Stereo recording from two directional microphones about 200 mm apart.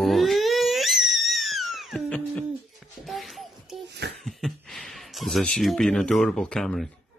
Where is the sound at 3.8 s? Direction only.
60° right (ahead or behind).